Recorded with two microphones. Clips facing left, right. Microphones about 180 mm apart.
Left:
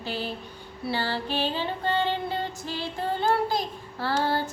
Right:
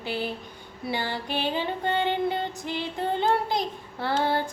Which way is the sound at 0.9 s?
15° right (ahead or behind).